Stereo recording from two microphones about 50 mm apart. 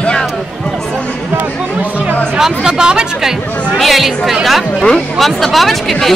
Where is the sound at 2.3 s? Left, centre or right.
Centre.